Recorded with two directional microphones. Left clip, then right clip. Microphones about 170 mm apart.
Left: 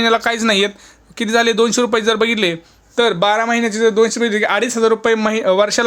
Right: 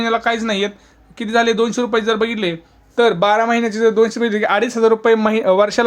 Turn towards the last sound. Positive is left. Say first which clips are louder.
# even
turn(degrees=-5)  # may be behind; listen again after turning